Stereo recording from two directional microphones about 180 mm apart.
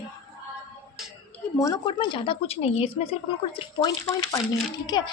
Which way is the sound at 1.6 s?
25° left (ahead or behind).